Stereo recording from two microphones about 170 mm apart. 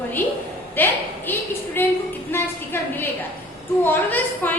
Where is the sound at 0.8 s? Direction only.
10° left (ahead or behind).